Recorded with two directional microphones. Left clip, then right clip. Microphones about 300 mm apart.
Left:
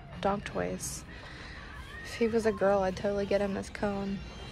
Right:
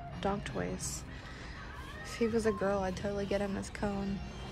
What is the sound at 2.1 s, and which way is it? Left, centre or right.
Speech, centre.